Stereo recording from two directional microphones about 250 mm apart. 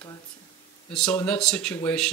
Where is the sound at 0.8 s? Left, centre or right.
Centre.